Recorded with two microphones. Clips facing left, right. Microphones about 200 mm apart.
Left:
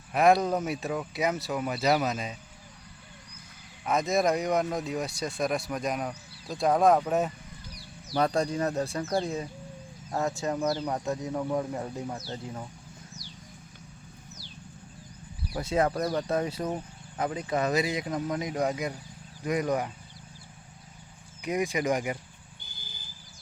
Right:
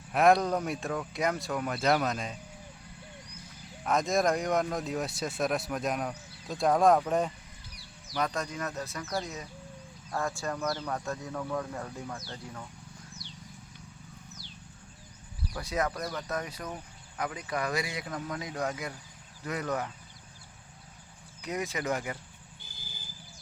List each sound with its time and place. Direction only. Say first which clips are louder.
0.1 s speech: left 1 dB; centre (ahead or behind)
3.8 s speech: left 1 dB; centre (ahead or behind)
8.1 s speech: left 6 dB; 30° left (ahead or behind)
10.1 s speech: left 4 dB; 20° left (ahead or behind)
15.5 s speech: left 6 dB; 25° left (ahead or behind)
21.4 s speech: left 5 dB; 15° left (ahead or behind)
22.6 s vehicle: even; centre (ahead or behind)